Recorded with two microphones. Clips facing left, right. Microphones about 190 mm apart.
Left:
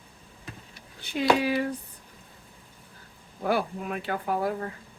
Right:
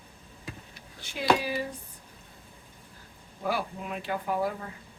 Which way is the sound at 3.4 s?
55° left (ahead or behind).